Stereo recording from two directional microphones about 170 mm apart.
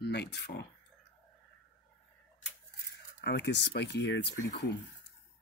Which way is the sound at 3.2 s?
90° left.